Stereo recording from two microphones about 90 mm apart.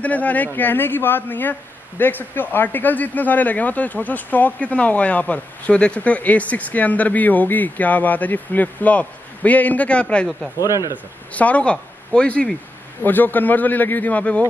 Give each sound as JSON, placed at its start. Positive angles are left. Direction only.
{"t": 0.0, "sound": "a man's voice", "side_deg": 15}
{"t": 11.3, "sound": "a man's voice", "side_deg": 15}